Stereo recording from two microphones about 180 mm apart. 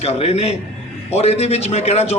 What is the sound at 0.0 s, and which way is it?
A man's voice, 35° left (ahead or behind).